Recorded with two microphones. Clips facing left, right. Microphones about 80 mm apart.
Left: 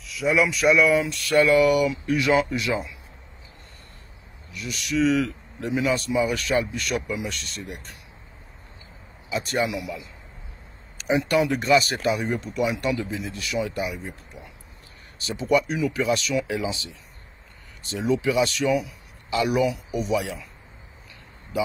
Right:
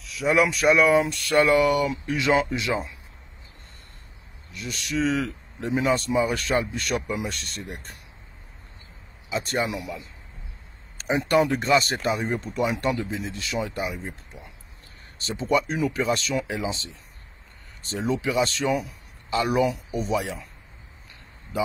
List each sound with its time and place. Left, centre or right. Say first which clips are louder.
0.3 s speech: right 1 dB; right
0.7 s speech: even; right
1.2 s speech: left 4 dB; right
4.6 s speech: left 3 dB; right
6.9 s speech: even; right
7.4 s speech: even; centre
9.3 s speech: left 1 dB; right
11.0 s speech: even; right
11.6 s speech: left 2 dB; right
15.3 s speech: left 2 dB; right
17.8 s speech: left 3 dB; right